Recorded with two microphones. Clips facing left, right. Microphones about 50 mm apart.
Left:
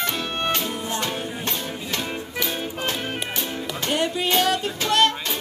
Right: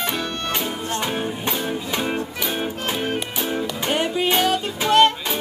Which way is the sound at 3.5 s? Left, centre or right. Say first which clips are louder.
Right 4 dB; centre.